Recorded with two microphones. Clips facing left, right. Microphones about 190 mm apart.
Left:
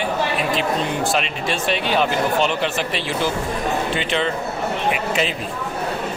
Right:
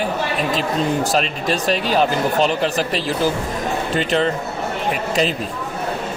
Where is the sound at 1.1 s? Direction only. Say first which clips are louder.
Right 3 dB; 40° right (ahead or behind).